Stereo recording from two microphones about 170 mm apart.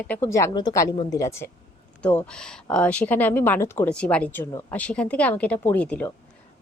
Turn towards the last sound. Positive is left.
turn(degrees=10)  # may be behind; listen again after turning